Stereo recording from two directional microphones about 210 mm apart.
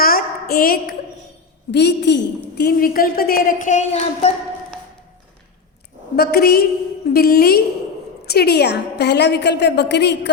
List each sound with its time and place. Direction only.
0.0 s a sound: 45° left (ahead or behind)
1.7 s a woman's voice: 55° left (ahead or behind); by 4.3 s 35° left (ahead or behind)
6.1 s a woman's voice: 45° left (ahead or behind)